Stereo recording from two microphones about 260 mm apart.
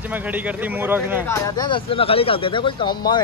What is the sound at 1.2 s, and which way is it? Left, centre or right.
Speech, centre.